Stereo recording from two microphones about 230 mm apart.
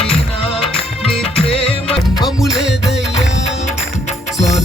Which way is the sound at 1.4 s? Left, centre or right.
Left.